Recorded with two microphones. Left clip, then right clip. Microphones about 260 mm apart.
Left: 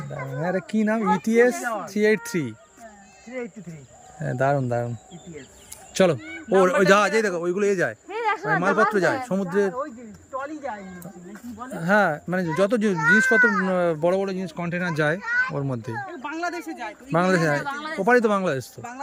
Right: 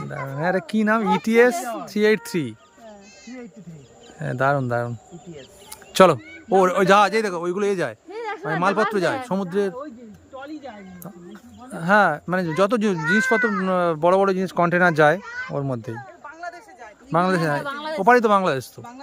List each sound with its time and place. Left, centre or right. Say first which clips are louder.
0.4 s speech: right 4 dB; centre
4.2 s speech: right 2 dB; centre
5.9 s speech: right 6 dB; centre
6.6 s speech: right 2 dB; centre
11.7 s speech: right 3 dB; centre
16.0 s a sound: left 7 dB; left
17.1 s speech: right 1 dB; centre